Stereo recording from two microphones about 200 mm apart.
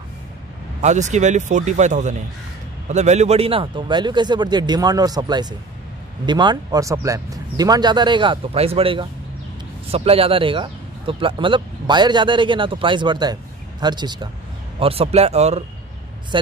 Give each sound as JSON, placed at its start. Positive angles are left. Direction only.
{"t": 0.7, "sound": "speech", "side_deg": -35}